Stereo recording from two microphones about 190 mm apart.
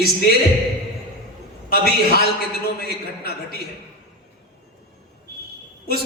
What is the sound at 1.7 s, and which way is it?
A man's voice, 55° left (ahead or behind).